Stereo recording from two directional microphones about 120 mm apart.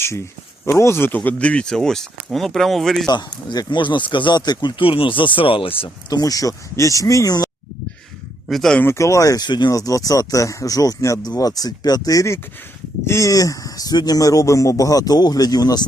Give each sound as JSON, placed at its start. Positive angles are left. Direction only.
{"t": 0.0, "sound": "speech", "side_deg": 20}
{"t": 3.1, "sound": "speech", "side_deg": 35}
{"t": 6.1, "sound": "speech", "side_deg": 30}
{"t": 8.4, "sound": "speech", "side_deg": 0}
{"t": 8.8, "sound": "speech", "side_deg": 25}